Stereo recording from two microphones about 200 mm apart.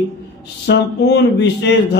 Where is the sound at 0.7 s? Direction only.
60° left (ahead or behind).